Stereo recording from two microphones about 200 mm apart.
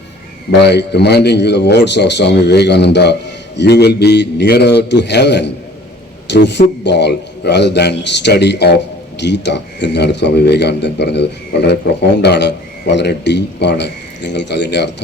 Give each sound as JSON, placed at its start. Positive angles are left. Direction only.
{"t": 0.6, "sound": "a man's voice", "side_deg": 55}